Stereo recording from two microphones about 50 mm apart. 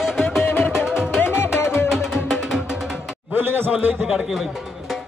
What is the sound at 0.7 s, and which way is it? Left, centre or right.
Music, centre.